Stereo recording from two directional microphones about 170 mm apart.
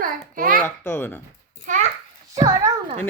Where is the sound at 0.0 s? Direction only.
55° right (ahead or behind).